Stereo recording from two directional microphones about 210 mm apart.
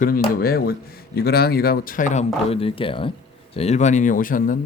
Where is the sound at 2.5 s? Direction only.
25° left (ahead or behind).